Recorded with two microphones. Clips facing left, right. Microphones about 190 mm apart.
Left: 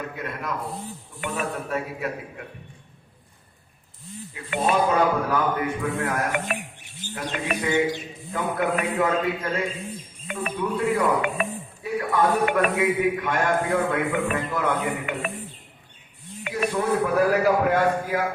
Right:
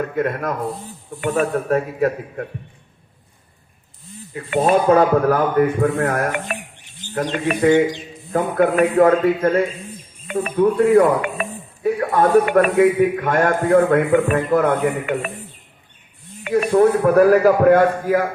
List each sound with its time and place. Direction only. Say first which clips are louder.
0.2 s a man's voice: right 11 dB; 50° right (ahead or behind)
4.5 s speech: right 7 dB; 40° right (ahead or behind)
4.9 s a man's voice: right 8 dB; 50° right (ahead or behind)
16.5 s a man's voice: right 10 dB; 55° right (ahead or behind)